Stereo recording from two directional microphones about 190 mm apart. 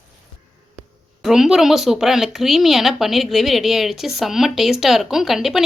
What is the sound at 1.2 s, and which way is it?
Speech, centre (ahead or behind).